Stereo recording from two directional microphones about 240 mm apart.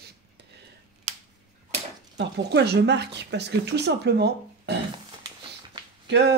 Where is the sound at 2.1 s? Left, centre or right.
Right.